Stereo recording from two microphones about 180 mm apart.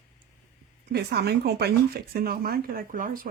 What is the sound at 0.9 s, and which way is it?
Speech, 65° right (ahead or behind).